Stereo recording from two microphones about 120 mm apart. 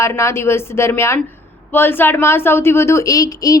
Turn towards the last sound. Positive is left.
turn(degrees=30)  # may be behind; listen again after turning